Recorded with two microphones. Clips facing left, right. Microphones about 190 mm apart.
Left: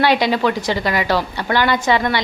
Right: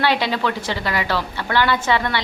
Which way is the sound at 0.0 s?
15° left (ahead or behind).